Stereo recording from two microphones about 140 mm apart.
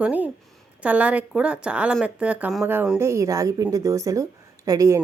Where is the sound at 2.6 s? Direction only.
15° right (ahead or behind).